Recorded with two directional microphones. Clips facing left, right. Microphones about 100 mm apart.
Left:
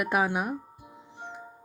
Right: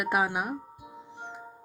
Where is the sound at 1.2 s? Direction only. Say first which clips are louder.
Left 1 dB; 20° right (ahead or behind).